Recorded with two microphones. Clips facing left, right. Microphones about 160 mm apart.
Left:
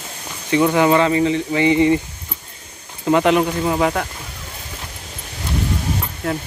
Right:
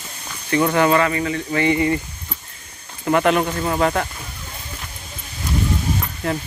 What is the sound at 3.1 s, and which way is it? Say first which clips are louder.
Speech: left 2 dB; 15° left (ahead or behind).